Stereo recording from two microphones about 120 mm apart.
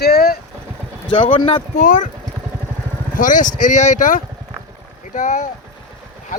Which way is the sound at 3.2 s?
90° left.